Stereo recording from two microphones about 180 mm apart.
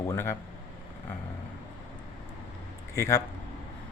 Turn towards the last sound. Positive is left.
turn(degrees=15)  # may be behind; listen again after turning